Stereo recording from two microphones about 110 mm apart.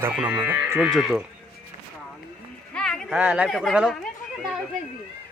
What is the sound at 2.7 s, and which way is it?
Music, 5° left (ahead or behind).